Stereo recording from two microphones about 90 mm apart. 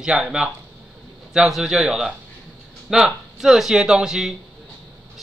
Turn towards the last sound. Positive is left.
turn(degrees=-5)  # may be behind; listen again after turning